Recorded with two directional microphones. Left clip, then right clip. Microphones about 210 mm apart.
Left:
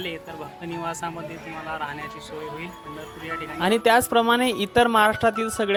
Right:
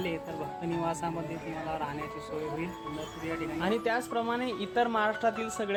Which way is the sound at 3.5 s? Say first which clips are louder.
Left 12 dB; 30° left (ahead or behind).